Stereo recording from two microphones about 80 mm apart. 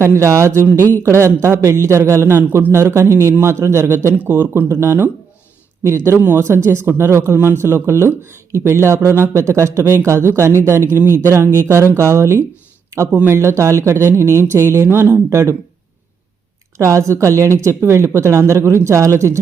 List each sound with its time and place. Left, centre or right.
0.0 s speech: right
4.1 s speech: right
6.1 s speech: right
6.4 s speech: right
13.1 s speech: right
13.3 s speech: right
16.7 s speech: right